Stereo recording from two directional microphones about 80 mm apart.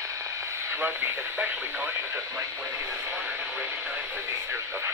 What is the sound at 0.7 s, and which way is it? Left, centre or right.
Speech, right.